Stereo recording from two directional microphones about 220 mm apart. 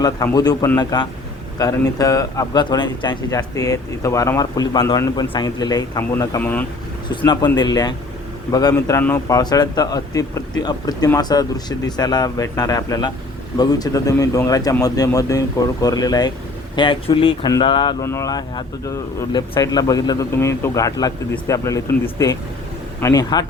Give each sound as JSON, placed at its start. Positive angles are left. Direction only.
{"t": 0.0, "sound": "speech", "side_deg": 15}
{"t": 7.3, "sound": "speech", "side_deg": 20}